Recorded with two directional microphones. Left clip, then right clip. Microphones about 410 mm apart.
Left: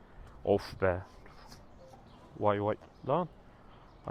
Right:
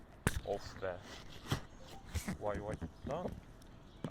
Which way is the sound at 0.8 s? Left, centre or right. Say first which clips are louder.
Left 12 dB; left.